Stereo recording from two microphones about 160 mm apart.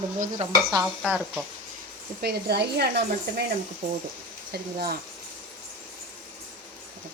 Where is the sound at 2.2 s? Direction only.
90° right.